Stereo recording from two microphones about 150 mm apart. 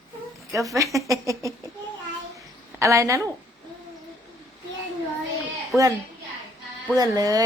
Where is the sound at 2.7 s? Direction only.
20° right (ahead or behind).